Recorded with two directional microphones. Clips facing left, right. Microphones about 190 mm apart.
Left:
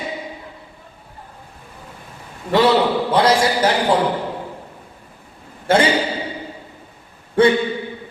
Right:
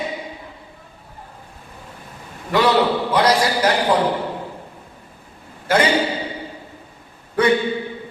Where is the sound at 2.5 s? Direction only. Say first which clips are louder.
Left 2 dB; 30° left (ahead or behind).